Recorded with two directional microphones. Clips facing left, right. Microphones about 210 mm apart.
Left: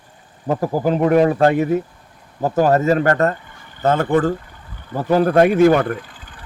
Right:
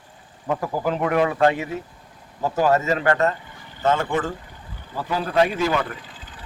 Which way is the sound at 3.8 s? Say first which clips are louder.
Left 6 dB; 40° left (ahead or behind).